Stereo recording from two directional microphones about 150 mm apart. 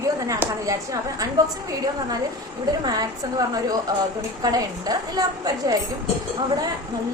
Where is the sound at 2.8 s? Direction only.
25° right (ahead or behind).